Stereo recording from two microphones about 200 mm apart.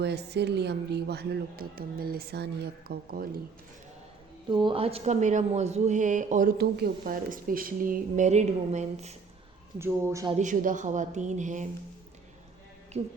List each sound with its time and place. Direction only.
0.0 s a woman's voice: 55° right (ahead or behind)
4.4 s speech: 25° right (ahead or behind); by 6.5 s 40° right (ahead or behind)
6.6 s speech: 55° right (ahead or behind); by 9.1 s 35° right (ahead or behind)
9.7 s speech: 15° right (ahead or behind)
10.3 s speech: 40° right (ahead or behind)